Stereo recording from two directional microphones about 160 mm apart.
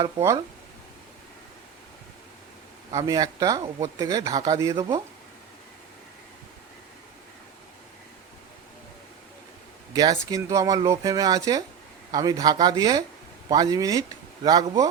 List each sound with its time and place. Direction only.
2.9 s speech: 20° right (ahead or behind)
9.9 s speech: 25° right (ahead or behind)